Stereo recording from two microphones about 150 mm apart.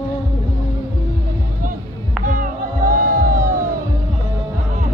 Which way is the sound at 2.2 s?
65° right (ahead or behind).